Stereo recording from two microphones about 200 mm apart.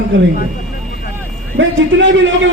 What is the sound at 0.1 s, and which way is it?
Speech, 65° right (ahead or behind).